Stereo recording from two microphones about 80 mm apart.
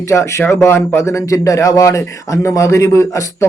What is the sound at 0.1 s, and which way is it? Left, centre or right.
Speech, left.